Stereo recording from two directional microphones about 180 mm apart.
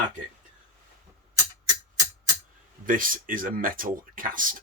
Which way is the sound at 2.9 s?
50° right (ahead or behind).